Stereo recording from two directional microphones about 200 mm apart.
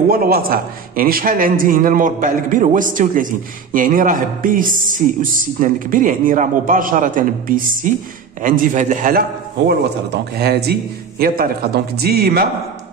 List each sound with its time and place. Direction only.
0.1 s a man's voice: 50° right (ahead or behind)
9.7 s a man's voice: 55° right (ahead or behind)